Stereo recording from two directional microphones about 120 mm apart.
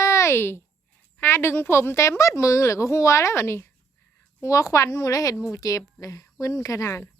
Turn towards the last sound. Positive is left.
turn(degrees=25)  # may be behind; listen again after turning